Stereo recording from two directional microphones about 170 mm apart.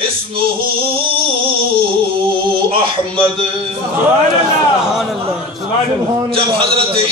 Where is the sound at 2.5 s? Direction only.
30° right (ahead or behind).